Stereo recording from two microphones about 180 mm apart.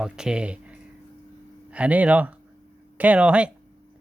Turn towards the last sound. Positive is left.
turn(degrees=-5)  # may be behind; listen again after turning